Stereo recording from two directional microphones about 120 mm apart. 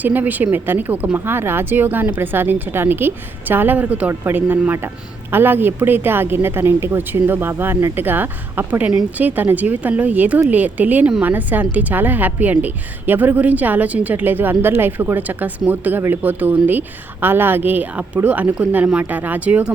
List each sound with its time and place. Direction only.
0.0 s speech: 15° right (ahead or behind)